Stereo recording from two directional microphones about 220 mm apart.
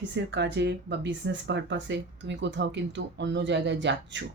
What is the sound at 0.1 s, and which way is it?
Speech, 50° right (ahead or behind).